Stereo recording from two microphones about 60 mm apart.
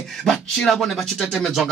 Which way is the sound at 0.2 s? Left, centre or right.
Centre.